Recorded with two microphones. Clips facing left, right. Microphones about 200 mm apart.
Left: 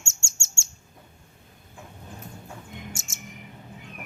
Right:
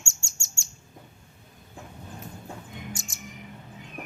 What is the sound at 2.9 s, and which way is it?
Bird, 25° left (ahead or behind).